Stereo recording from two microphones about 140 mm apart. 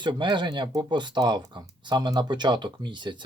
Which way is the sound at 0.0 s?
35° right (ahead or behind).